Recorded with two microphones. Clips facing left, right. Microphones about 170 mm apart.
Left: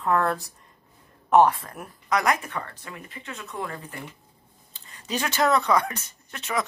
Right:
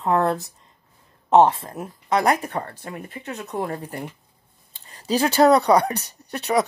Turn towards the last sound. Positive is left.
turn(degrees=-35)  # may be behind; listen again after turning